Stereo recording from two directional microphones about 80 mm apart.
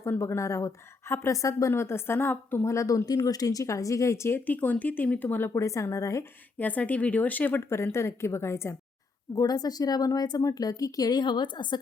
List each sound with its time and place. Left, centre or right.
0.0 s a woman's voice: left
1.7 s speech: left
2.7 s speech: left
4.4 s speech: left
5.5 s a woman's voice: left
6.6 s a woman's voice: centre
9.3 s speech: left